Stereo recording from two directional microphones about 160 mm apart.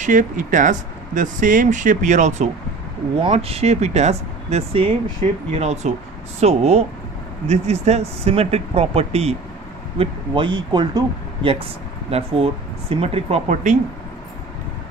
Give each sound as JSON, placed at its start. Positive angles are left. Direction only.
{"t": 0.0, "sound": "speech", "side_deg": -55}
{"t": 3.2, "sound": "speech", "side_deg": -35}
{"t": 12.1, "sound": "speech", "side_deg": -40}